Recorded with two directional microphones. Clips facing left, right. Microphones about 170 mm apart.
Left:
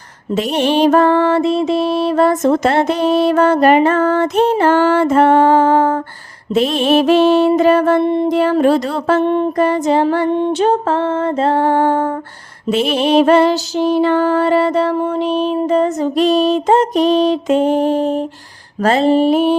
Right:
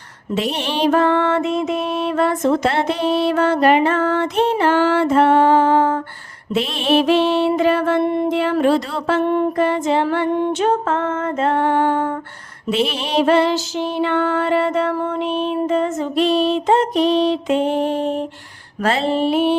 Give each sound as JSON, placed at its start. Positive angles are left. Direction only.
{"t": 0.3, "sound": "mantra", "side_deg": 45}
{"t": 6.5, "sound": "music", "side_deg": 40}
{"t": 8.0, "sound": "music", "side_deg": 25}
{"t": 8.3, "sound": "music", "side_deg": 40}
{"t": 9.2, "sound": "music", "side_deg": 25}
{"t": 9.6, "sound": "music", "side_deg": 40}
{"t": 10.2, "sound": "music", "side_deg": 25}
{"t": 14.9, "sound": "music", "side_deg": 25}
{"t": 15.2, "sound": "music", "side_deg": 35}